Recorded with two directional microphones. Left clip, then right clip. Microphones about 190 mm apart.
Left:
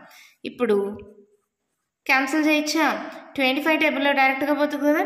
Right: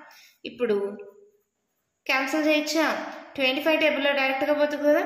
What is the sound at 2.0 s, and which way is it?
A woman's voice, 35° left (ahead or behind).